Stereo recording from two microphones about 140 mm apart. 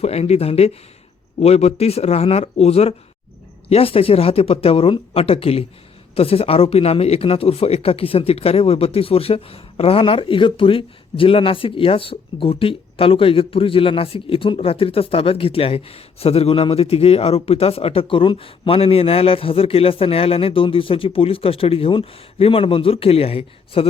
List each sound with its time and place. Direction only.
0.0 s speech: 50° left (ahead or behind)